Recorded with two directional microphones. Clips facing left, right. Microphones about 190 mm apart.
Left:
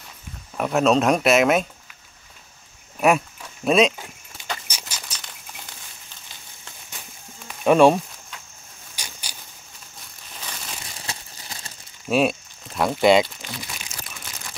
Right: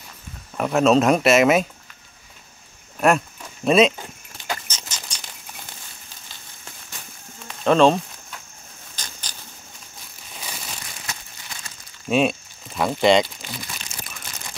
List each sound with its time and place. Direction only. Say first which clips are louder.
0.6 s speech: right 2 dB; centre (ahead or behind)
3.0 s a sound: even; 5° left (ahead or behind)
7.4 s sizzle: left 1 dB; 10° left (ahead or behind)
8.9 s a sound: even; 10° left (ahead or behind)
10.4 s crumpling: right 1 dB; 10° right (ahead or behind)
11.1 s crumpling: left 2 dB; 30° left (ahead or behind)
12.1 s speech: even; 5° left (ahead or behind)